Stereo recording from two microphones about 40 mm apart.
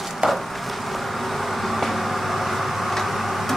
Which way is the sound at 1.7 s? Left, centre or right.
Centre.